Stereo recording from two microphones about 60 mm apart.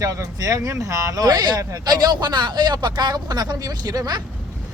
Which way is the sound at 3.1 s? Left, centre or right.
Right.